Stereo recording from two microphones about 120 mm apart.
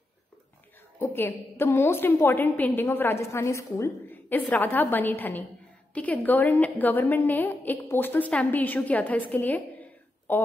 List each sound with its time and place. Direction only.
0.9 s a woman's voice: 20° left (ahead or behind)